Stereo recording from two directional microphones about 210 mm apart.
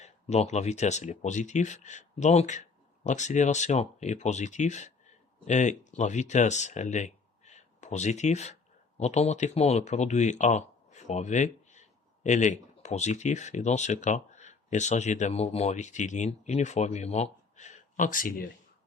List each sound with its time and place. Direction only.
0.0 s speech: 30° left (ahead or behind)